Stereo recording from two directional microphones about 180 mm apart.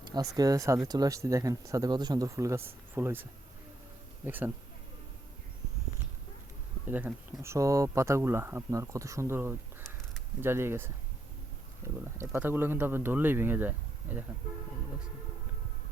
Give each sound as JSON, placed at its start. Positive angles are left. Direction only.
{"t": 0.1, "sound": "speech", "side_deg": -20}
{"t": 4.3, "sound": "speech", "side_deg": -10}
{"t": 6.8, "sound": "speech", "side_deg": -10}